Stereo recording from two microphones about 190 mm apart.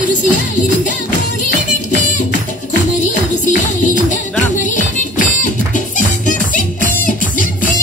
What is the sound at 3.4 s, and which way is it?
Music, 40° left (ahead or behind).